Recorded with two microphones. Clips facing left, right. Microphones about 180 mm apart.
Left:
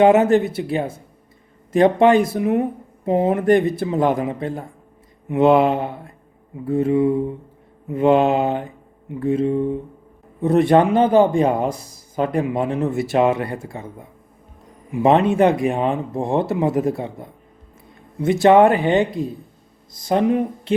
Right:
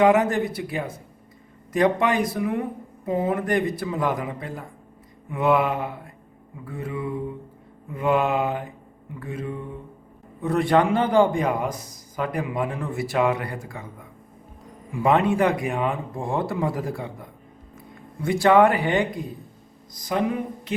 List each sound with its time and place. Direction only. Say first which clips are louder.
0.0 s a man's voice: left 5 dB; 25° left (ahead or behind)
15.3 s a man's voice: left 5 dB; 25° left (ahead or behind)